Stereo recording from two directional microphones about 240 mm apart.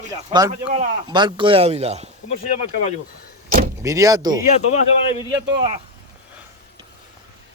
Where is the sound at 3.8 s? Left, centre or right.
Centre.